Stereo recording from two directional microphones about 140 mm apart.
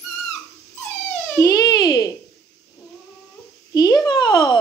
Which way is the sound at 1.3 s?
20° left (ahead or behind).